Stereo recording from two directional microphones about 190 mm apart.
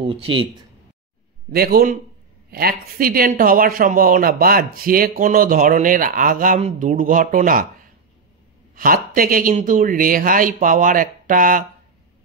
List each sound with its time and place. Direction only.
0.0 s speech: 30° right (ahead or behind)
1.5 s speech: 50° right (ahead or behind)